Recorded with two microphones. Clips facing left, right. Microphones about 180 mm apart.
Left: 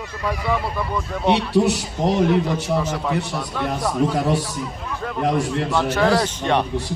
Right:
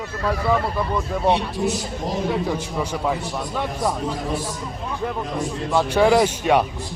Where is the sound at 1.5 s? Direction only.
70° left (ahead or behind).